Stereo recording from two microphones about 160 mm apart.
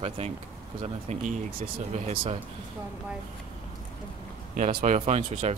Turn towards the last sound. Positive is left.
turn(degrees=-45)  # may be behind; listen again after turning